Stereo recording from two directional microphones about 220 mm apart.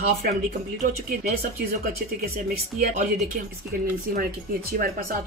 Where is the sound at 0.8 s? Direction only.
35° right (ahead or behind).